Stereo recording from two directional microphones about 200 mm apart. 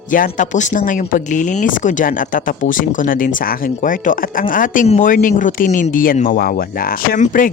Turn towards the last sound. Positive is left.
turn(degrees=40)  # may be behind; listen again after turning